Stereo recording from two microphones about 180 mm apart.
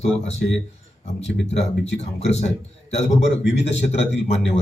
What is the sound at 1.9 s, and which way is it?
Speech, 35° left (ahead or behind).